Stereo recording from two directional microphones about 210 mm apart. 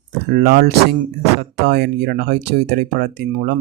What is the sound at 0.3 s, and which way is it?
Speech, 45° right (ahead or behind).